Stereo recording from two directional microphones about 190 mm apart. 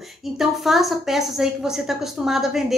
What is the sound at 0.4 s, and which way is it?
A woman's voice, centre (ahead or behind).